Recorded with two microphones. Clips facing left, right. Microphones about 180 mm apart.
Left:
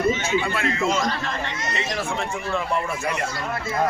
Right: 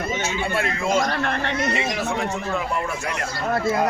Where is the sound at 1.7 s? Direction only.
10° right (ahead or behind).